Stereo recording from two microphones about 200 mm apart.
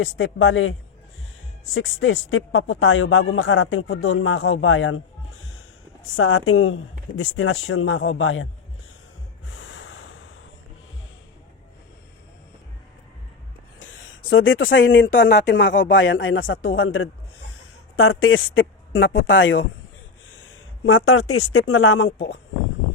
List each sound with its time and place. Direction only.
0.0 s speech: 75° left (ahead or behind)
6.1 s speech: 80° left
9.5 s snort: 75° left (ahead or behind)
14.3 s speech: 85° left
20.8 s speech: 90° left